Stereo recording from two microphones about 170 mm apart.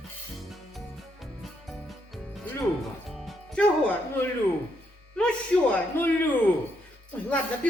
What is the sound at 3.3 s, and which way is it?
Music, 5° left (ahead or behind).